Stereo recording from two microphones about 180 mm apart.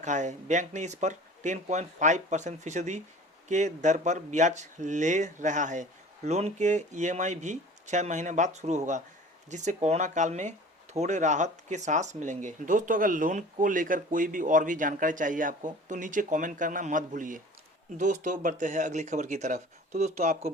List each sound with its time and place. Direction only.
0.0 s speech: 40° right (ahead or behind)